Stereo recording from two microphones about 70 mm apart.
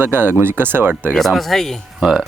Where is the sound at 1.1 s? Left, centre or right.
Centre.